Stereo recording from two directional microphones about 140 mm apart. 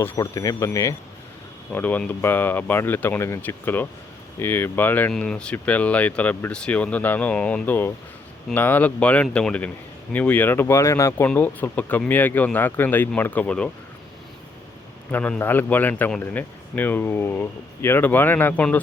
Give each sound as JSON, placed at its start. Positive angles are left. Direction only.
{"t": 0.0, "sound": "a man's voice", "side_deg": 25}
{"t": 15.1, "sound": "a man's voice", "side_deg": 10}